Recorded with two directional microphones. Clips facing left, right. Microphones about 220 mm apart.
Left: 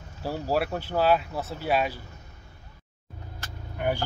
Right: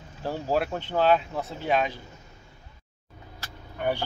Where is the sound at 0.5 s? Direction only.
5° left (ahead or behind).